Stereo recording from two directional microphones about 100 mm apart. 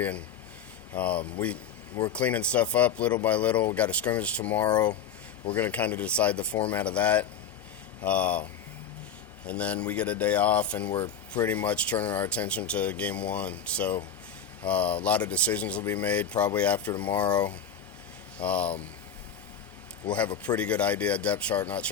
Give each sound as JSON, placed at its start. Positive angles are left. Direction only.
{"t": 0.9, "sound": "speech", "side_deg": 15}
{"t": 9.5, "sound": "speech", "side_deg": 15}
{"t": 18.3, "sound": "speech", "side_deg": 15}
{"t": 20.1, "sound": "speech", "side_deg": 15}